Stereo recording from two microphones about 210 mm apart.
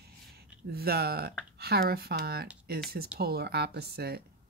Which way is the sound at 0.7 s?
50° right (ahead or behind).